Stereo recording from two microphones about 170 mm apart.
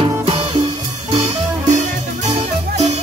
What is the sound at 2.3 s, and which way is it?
Music, 40° right (ahead or behind).